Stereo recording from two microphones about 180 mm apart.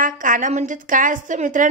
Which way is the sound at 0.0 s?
50° right (ahead or behind).